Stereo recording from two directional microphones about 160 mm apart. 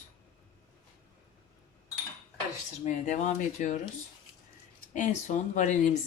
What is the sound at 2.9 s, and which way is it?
Speech, 50° left (ahead or behind).